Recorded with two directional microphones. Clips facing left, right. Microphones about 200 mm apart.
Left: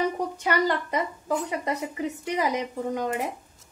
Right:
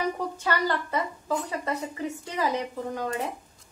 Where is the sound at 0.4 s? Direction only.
15° left (ahead or behind).